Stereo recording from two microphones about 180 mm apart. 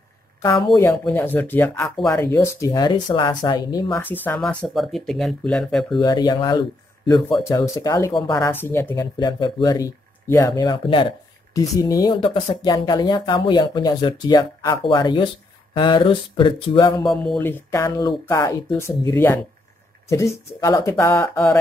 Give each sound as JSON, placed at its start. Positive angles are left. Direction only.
{"t": 0.7, "sound": "speech", "side_deg": 15}
{"t": 4.0, "sound": "speech", "side_deg": 10}
{"t": 5.9, "sound": "speech", "side_deg": 25}
{"t": 7.4, "sound": "speech", "side_deg": 15}
{"t": 8.5, "sound": "speech", "side_deg": 10}
{"t": 17.0, "sound": "speech", "side_deg": 0}